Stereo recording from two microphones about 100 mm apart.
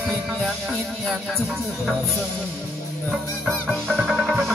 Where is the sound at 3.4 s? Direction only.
5° left (ahead or behind).